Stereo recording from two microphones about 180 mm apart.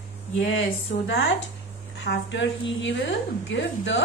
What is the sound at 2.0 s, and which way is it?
A woman's voice, 85° left.